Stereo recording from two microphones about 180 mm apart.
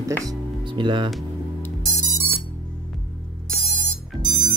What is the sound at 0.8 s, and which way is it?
Speech, 25° right (ahead or behind).